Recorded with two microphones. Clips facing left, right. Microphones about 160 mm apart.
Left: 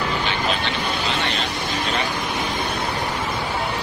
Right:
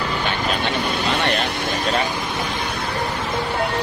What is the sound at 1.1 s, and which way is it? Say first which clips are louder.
Vehicle: right 4 dB; 65° right (ahead or behind).